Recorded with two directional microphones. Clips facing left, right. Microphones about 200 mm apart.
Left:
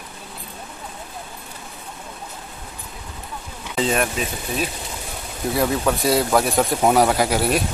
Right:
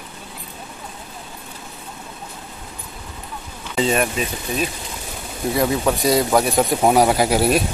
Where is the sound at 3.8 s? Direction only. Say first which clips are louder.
Right 2 dB; centre (ahead or behind).